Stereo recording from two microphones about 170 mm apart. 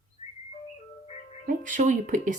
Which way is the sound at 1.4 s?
50° right (ahead or behind).